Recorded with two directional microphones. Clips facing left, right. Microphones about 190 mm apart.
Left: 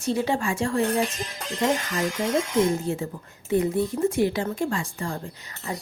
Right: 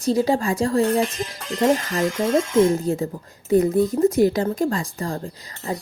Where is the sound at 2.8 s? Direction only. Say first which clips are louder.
Right 5 dB; 40° right (ahead or behind).